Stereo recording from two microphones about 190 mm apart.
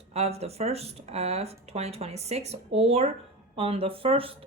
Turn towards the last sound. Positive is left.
turn(degrees=-30)  # may be behind; listen again after turning